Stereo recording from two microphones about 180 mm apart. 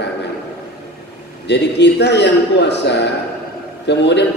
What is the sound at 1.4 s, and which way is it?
A man's voice, 70° left (ahead or behind).